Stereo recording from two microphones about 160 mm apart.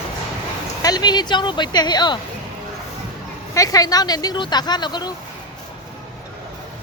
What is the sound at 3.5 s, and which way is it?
Speech, 20° left (ahead or behind).